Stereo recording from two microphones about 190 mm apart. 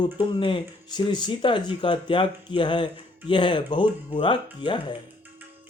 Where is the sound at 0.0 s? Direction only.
25° left (ahead or behind).